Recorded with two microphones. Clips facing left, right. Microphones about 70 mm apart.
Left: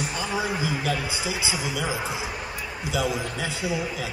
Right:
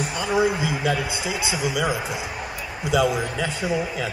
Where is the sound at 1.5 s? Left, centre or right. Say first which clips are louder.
Right 4 dB; centre.